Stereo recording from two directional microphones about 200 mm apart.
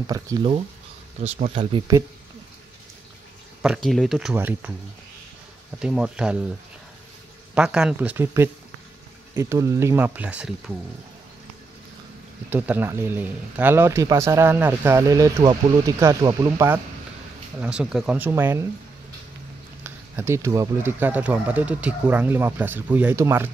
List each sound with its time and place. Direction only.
0.0 s speech: 20° right (ahead or behind)
1.2 s speech: 35° right (ahead or behind)
3.6 s speech: centre (ahead or behind)
5.8 s speech: 5° right (ahead or behind)
7.5 s speech: 5° right (ahead or behind)
12.4 s speech: 10° right (ahead or behind)
19.8 s speech: 15° right (ahead or behind)